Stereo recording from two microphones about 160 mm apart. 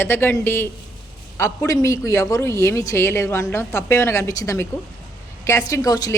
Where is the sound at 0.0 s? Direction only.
15° left (ahead or behind).